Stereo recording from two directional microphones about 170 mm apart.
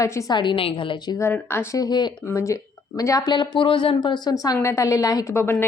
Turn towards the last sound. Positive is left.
turn(degrees=15)  # may be behind; listen again after turning